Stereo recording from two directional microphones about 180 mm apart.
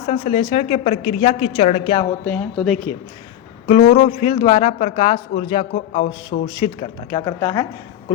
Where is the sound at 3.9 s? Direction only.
35° left (ahead or behind).